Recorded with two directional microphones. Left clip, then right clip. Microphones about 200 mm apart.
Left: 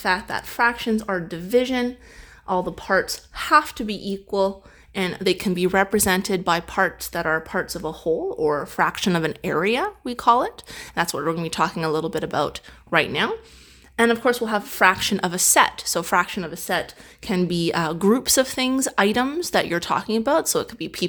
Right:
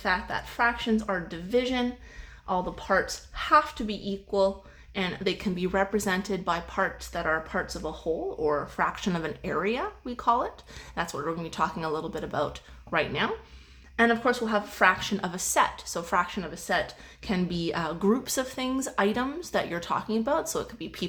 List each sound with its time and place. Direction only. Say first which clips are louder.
0.0 s a woman's voice: left 5 dB; 45° left (ahead or behind)